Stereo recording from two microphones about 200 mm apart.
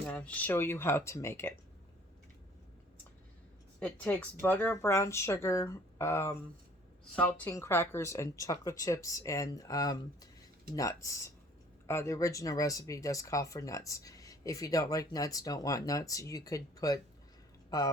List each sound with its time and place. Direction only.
0.0 s speech: 5° left (ahead or behind)
3.8 s speech: 10° left (ahead or behind)